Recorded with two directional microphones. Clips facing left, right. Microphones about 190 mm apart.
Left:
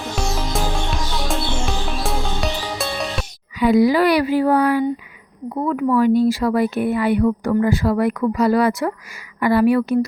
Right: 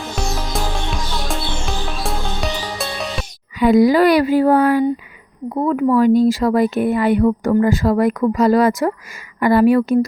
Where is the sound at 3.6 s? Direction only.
45° right (ahead or behind).